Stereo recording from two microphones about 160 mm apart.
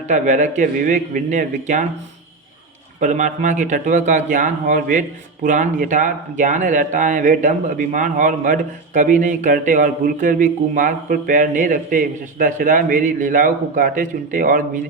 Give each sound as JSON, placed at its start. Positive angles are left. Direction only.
{"t": 0.1, "sound": "speech", "side_deg": -50}
{"t": 3.0, "sound": "speech", "side_deg": -50}